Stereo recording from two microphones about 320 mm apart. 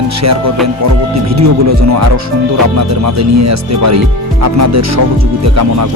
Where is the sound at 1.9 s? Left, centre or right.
Right.